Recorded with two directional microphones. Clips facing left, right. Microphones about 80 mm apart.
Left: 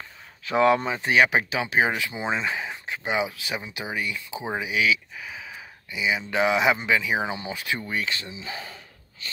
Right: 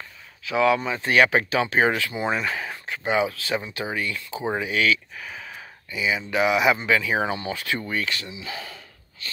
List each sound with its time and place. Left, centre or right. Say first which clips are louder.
0.5 s speech: left 1 dB; left
0.8 s speech: right 1 dB; centre
5.9 s speech: right 1 dB; left